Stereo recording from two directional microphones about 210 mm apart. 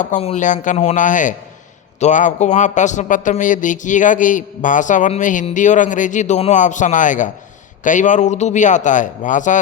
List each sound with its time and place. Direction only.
0.0 s a man's voice: 35° left (ahead or behind)